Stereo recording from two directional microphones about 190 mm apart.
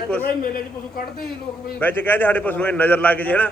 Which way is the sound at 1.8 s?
10° left (ahead or behind).